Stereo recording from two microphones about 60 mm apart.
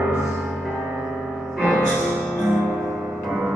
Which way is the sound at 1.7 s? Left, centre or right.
Centre.